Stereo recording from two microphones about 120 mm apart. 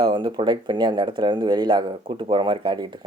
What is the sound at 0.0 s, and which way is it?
Speech, 40° right (ahead or behind).